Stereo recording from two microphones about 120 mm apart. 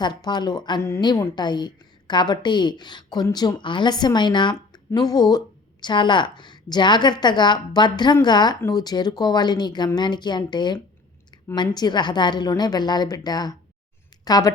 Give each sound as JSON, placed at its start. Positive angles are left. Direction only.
{"t": 0.0, "sound": "a woman's voice", "side_deg": 40}
{"t": 0.8, "sound": "a woman's voice", "side_deg": 20}
{"t": 1.4, "sound": "a woman's voice", "side_deg": 40}